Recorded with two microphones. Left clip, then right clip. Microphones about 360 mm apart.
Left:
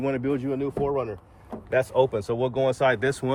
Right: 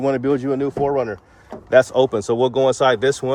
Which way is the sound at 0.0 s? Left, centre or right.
Centre.